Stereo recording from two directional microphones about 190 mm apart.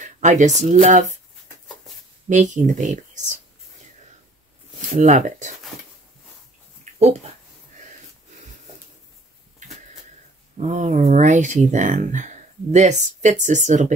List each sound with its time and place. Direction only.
0.0 s a sound: 40° right (ahead or behind)
0.6 s speech: 40° right (ahead or behind)
2.2 s speech: 40° right (ahead or behind)
4.9 s speech: 40° right (ahead or behind)
6.8 s a sound: 35° right (ahead or behind)
10.6 s speech: 40° right (ahead or behind)